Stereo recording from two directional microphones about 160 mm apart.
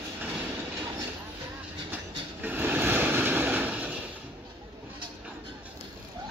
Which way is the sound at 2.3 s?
10° right (ahead or behind).